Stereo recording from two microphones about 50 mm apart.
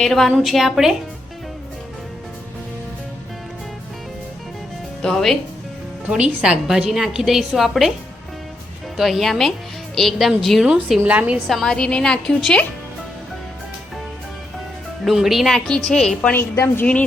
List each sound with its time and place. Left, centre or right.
0.0 s a woman's voice: centre
0.3 s a woman's voice: centre
5.0 s a woman's voice: centre
6.1 s a woman's voice: right
6.9 s a woman's voice: centre
9.0 s a woman's voice: centre
10.6 s a woman's voice: centre
11.0 s a woman's voice: right
11.4 s a woman's voice: centre
15.0 s a woman's voice: centre
15.4 s a woman's voice: centre
16.4 s a woman's voice: left